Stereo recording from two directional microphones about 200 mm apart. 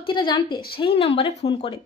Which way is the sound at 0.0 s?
25° left (ahead or behind).